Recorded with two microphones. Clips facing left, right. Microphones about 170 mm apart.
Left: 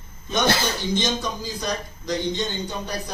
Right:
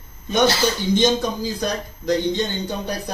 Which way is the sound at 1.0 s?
60° right (ahead or behind).